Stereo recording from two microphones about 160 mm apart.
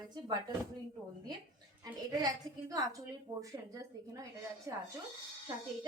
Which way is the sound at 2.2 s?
25° right (ahead or behind).